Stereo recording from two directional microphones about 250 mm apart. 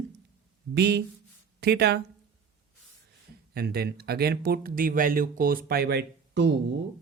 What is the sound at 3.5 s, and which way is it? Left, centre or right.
Speech, right.